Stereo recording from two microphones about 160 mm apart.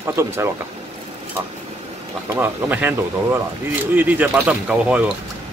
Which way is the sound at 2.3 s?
10° right (ahead or behind).